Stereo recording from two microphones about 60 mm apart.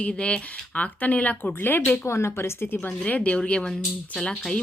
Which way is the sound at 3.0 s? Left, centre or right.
Left.